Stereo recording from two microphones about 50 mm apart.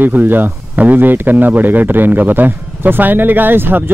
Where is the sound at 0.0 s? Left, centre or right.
Right.